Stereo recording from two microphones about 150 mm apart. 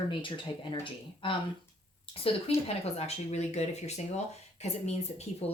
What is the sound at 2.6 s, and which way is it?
Speech, 45° left (ahead or behind).